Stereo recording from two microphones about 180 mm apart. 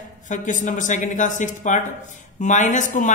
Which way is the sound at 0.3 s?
45° left (ahead or behind).